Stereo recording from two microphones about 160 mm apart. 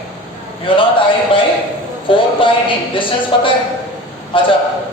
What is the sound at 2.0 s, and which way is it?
A woman's voice, 30° left (ahead or behind).